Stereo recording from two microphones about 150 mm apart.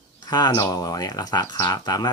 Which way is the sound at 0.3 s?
30° left (ahead or behind).